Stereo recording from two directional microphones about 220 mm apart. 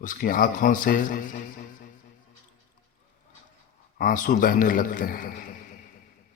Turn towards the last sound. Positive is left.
turn(degrees=40)  # may be behind; listen again after turning